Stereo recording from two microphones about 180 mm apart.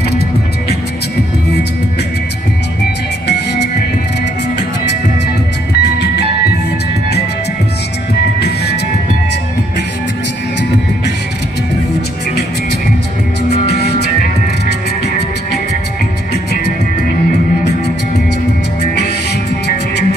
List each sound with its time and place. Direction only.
3.3 s music: 70° left (ahead or behind)
5.8 s music: 70° left (ahead or behind)
8.4 s music: 65° left (ahead or behind)
13.5 s music: 65° left (ahead or behind)
18.8 s music: 70° left (ahead or behind)